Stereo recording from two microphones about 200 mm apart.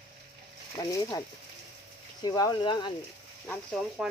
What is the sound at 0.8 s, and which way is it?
Speech, 15° left (ahead or behind).